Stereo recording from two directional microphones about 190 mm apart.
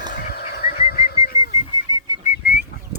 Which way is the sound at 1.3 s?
15° right (ahead or behind).